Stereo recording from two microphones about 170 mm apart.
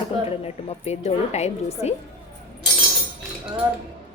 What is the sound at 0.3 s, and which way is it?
A woman's voice, 35° left (ahead or behind).